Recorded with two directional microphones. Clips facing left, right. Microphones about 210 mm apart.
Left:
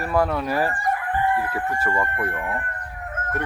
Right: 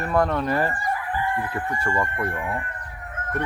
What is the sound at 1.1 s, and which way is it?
Chicken, 55° left (ahead or behind).